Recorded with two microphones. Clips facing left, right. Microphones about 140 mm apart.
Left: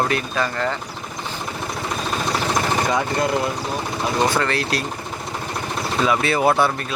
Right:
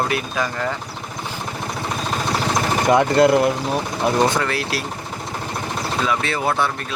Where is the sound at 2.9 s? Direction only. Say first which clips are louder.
Right 7 dB; 65° right (ahead or behind).